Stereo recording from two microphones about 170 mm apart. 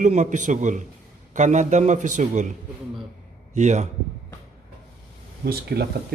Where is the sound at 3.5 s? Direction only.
45° right (ahead or behind).